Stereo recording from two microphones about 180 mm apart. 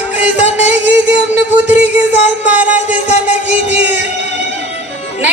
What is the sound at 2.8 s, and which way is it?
Music, 40° left (ahead or behind).